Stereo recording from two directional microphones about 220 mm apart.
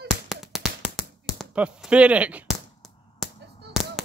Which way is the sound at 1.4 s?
5° right (ahead or behind).